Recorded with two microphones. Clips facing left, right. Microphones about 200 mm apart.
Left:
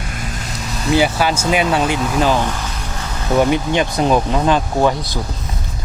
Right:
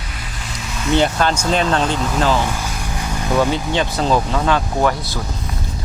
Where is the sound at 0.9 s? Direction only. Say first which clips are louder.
Left 1 dB; 5° left (ahead or behind).